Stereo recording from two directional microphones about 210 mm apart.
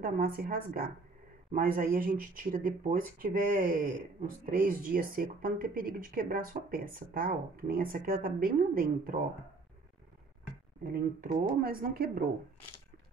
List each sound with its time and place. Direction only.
0.0 s speech: 45° right (ahead or behind)
10.9 s speech: 45° right (ahead or behind)